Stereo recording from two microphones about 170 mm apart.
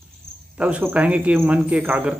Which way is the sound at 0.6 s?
10° right (ahead or behind).